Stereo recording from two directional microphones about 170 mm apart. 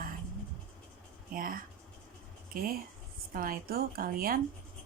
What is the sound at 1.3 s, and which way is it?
Speech, 55° right (ahead or behind).